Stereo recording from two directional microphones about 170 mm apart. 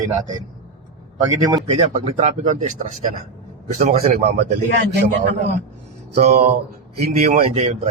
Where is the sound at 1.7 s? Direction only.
40° right (ahead or behind).